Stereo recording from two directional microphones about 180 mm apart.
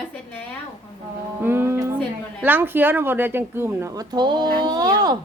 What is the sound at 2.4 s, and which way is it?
A woman's voice, 10° right (ahead or behind).